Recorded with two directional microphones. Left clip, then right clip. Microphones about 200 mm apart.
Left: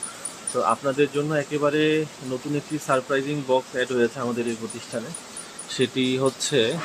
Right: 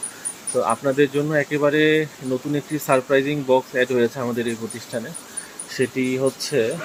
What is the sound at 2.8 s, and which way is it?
Speech, 15° right (ahead or behind).